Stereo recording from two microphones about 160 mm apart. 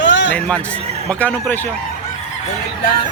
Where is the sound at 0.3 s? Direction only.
5° left (ahead or behind).